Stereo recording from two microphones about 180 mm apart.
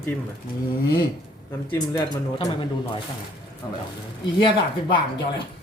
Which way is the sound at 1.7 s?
20° left (ahead or behind).